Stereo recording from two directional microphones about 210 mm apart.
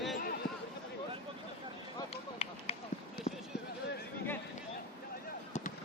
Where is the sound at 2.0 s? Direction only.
30° left (ahead or behind).